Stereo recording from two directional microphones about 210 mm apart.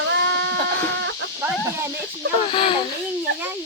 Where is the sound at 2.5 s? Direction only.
25° left (ahead or behind).